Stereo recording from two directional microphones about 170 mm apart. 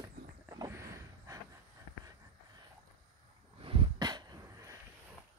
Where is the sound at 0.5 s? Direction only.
20° right (ahead or behind).